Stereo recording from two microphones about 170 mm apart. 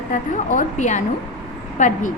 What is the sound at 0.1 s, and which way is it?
A woman's voice, 45° left (ahead or behind).